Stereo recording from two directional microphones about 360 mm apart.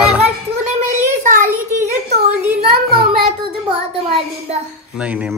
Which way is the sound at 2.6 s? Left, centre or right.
Right.